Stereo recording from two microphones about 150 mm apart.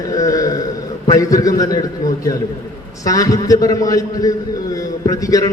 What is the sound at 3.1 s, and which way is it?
A man's voice, 25° left (ahead or behind).